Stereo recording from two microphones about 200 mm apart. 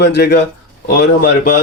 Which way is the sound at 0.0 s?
55° left (ahead or behind).